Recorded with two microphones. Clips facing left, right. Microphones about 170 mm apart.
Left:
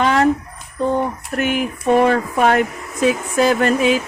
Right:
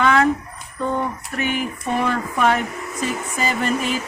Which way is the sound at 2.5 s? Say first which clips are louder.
Left 4 dB; 70° left (ahead or behind).